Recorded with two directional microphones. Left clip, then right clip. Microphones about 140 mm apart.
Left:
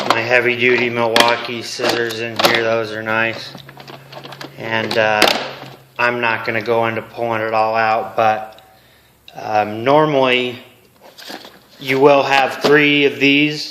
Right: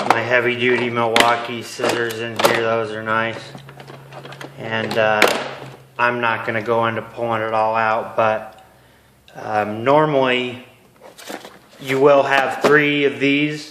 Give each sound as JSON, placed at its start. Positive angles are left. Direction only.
{"t": 0.1, "sound": "speech", "side_deg": 15}
{"t": 4.5, "sound": "speech", "side_deg": 25}
{"t": 12.0, "sound": "speech", "side_deg": 20}